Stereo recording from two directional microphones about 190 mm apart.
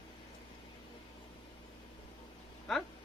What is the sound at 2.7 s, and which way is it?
Speech, centre (ahead or behind).